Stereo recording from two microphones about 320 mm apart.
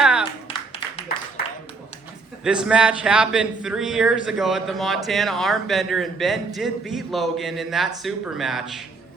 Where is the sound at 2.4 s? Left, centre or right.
Centre.